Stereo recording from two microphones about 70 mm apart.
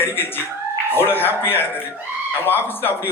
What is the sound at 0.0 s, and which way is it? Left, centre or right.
A man's voice, left.